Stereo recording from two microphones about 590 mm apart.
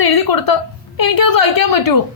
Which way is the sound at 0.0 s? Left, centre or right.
Left.